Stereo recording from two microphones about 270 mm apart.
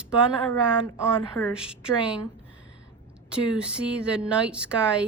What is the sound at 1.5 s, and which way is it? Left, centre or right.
Speech, centre.